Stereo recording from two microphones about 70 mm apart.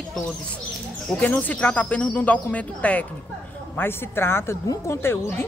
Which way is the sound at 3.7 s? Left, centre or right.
Left.